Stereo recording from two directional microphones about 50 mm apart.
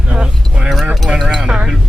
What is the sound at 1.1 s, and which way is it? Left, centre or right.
Speech, centre.